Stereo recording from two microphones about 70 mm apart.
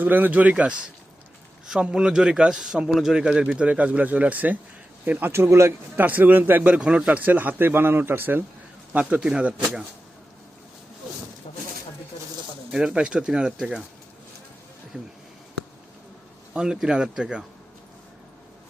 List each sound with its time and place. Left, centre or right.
0.0 s a man's voice: right
5.3 s speech: right
6.0 s a man's voice: right
6.6 s a man's voice: centre
9.1 s a man's voice: centre
12.7 s a man's voice: centre
14.9 s a man's voice: centre
16.6 s a man's voice: centre